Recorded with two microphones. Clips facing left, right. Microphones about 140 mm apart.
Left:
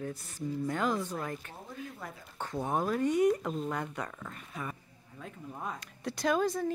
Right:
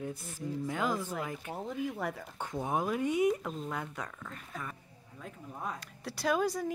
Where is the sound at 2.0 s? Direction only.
75° right (ahead or behind).